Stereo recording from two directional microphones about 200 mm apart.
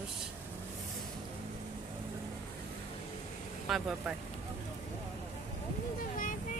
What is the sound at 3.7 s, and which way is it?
Speech, centre (ahead or behind).